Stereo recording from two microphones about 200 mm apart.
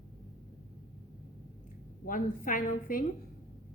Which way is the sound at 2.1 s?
45° left (ahead or behind).